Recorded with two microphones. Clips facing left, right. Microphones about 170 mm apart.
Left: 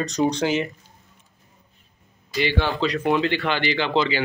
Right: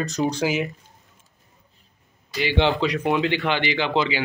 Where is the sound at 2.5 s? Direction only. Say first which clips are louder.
Right 2 dB; 20° right (ahead or behind).